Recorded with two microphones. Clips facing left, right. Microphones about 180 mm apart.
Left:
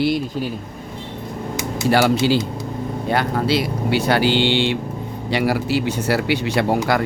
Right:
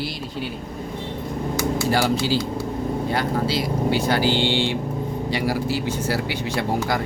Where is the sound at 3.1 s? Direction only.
65° left (ahead or behind).